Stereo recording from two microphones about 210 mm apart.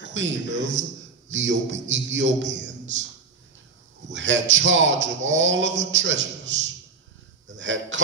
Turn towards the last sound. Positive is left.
turn(degrees=-65)  # may be behind; listen again after turning